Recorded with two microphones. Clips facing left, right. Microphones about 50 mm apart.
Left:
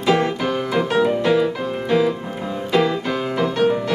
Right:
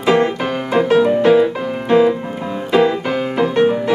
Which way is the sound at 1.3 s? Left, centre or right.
Centre.